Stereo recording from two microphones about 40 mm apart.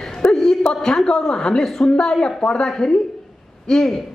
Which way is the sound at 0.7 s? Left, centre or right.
Centre.